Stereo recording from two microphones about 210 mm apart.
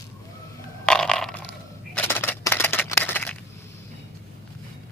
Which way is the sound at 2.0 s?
10° left (ahead or behind).